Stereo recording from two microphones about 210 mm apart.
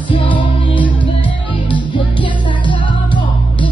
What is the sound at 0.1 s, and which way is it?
Music, 25° left (ahead or behind).